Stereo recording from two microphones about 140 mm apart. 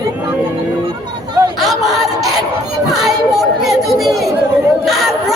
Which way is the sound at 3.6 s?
Centre (ahead or behind).